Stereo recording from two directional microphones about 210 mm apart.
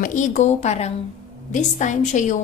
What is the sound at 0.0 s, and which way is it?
A woman's voice, 35° left (ahead or behind).